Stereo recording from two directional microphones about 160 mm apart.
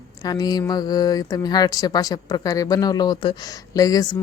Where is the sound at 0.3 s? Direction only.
25° left (ahead or behind).